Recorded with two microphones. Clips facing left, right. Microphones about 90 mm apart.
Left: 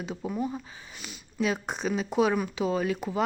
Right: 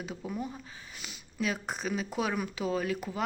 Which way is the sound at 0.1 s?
20° left (ahead or behind).